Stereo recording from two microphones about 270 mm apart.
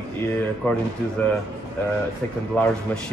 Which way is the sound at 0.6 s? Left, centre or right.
Centre.